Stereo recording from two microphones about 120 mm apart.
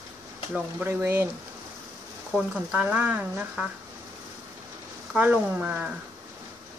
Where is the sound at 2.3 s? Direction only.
10° right (ahead or behind).